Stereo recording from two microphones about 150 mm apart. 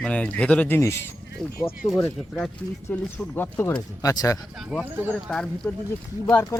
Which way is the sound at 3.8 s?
25° left (ahead or behind).